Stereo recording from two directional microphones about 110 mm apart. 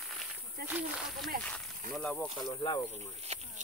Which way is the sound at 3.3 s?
75° right (ahead or behind).